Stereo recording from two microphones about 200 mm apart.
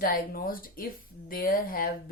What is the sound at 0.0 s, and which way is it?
Speech, 45° left (ahead or behind).